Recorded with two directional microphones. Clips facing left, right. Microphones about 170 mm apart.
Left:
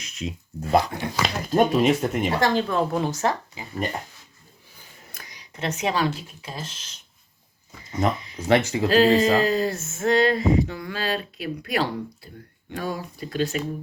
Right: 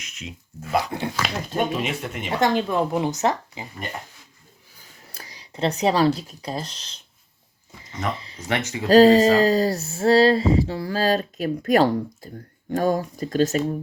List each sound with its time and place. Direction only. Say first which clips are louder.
0.0 s speech: left 6 dB; 35° left (ahead or behind)
2.4 s speech: right 4 dB; 15° right (ahead or behind)
5.1 s speech: right 5 dB; 30° right (ahead or behind)
8.4 s speech: left 8 dB; 30° left (ahead or behind)
8.9 s speech: right 5 dB; 35° right (ahead or behind)